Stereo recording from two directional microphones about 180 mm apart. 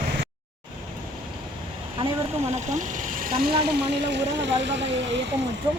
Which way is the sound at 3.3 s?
60° right (ahead or behind).